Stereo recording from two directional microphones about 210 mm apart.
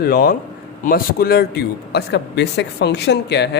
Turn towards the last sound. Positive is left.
turn(degrees=55)  # may be behind; listen again after turning